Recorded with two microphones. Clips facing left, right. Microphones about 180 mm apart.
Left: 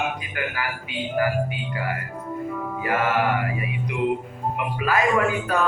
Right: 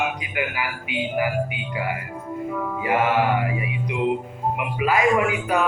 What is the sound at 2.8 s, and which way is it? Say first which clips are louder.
Music: right 2 dB; 20° right (ahead or behind).